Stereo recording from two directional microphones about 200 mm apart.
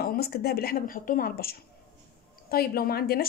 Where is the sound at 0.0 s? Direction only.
50° left (ahead or behind).